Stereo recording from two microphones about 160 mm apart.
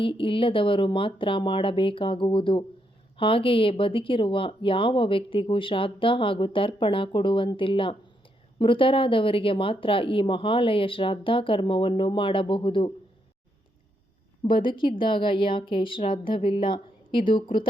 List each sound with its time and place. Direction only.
0.0 s speech: 35° left (ahead or behind)
14.4 s speech: 30° left (ahead or behind)